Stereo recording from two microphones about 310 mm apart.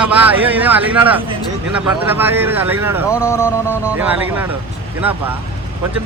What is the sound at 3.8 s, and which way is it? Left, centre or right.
Speech, centre.